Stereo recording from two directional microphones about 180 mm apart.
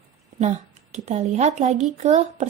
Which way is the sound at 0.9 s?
40° right (ahead or behind).